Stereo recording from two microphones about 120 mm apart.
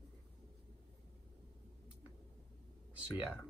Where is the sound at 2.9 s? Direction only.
10° right (ahead or behind).